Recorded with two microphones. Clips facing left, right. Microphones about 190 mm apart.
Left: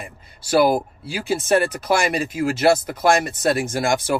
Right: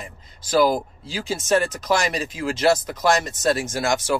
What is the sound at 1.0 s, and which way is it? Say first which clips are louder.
Speech: left 2 dB; 55° left (ahead or behind).